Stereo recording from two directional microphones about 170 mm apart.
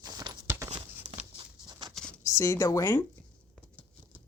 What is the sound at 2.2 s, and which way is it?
Speech, 20° left (ahead or behind).